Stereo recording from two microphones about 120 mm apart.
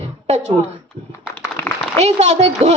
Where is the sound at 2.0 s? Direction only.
65° right (ahead or behind).